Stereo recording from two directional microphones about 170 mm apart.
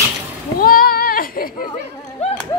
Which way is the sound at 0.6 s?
60° left (ahead or behind).